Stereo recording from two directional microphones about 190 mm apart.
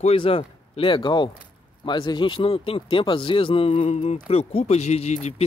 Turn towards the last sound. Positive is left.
turn(degrees=35)  # may be behind; listen again after turning